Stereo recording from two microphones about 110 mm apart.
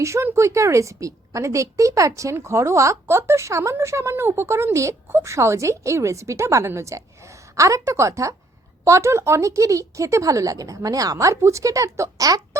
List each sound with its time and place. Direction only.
0.0 s a woman's voice: 25° right (ahead or behind)